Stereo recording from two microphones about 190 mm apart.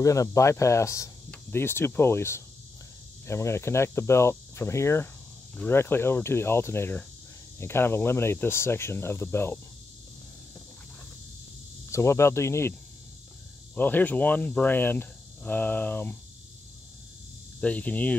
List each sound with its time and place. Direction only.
0.0 s speech: 15° left (ahead or behind)
11.9 s speech: 15° left (ahead or behind)
13.7 s speech: 10° left (ahead or behind)
17.6 s speech: 5° left (ahead or behind)